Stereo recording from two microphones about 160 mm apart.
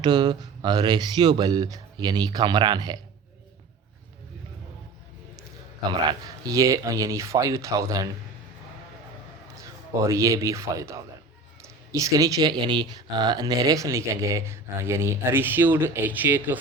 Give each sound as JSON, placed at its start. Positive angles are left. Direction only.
{"t": 0.0, "sound": "speech", "side_deg": -25}
{"t": 6.1, "sound": "speech", "side_deg": -25}
{"t": 10.0, "sound": "speech", "side_deg": -20}